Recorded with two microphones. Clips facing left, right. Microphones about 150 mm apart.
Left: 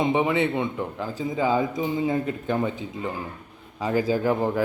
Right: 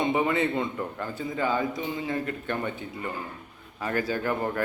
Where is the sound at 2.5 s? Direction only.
10° left (ahead or behind).